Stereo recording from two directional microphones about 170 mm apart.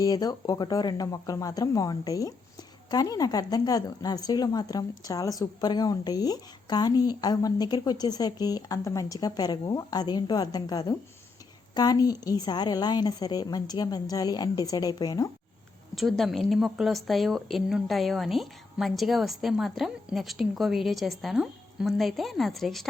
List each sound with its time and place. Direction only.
0.0 s speech: 20° left (ahead or behind)
16.0 s a woman's voice: centre (ahead or behind)